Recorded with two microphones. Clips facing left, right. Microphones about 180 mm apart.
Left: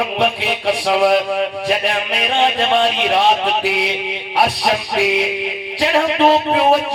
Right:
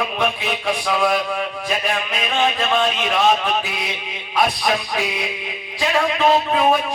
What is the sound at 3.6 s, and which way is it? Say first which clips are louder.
Speech: left 9 dB; 70° left (ahead or behind).